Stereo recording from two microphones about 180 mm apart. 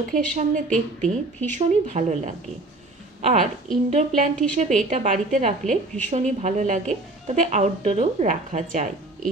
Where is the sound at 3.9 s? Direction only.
45° right (ahead or behind).